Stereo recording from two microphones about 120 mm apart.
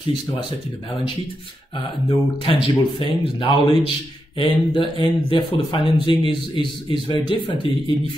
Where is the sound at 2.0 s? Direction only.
40° left (ahead or behind).